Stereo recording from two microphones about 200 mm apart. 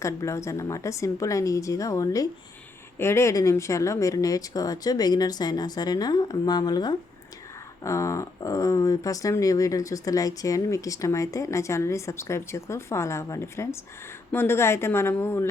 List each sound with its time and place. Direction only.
0.0 s speech: 15° left (ahead or behind)